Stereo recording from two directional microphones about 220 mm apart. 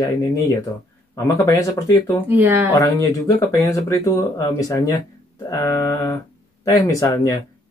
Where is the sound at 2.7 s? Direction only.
15° left (ahead or behind).